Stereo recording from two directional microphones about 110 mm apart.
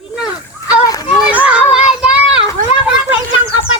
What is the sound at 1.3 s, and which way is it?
Children playing, 15° right (ahead or behind).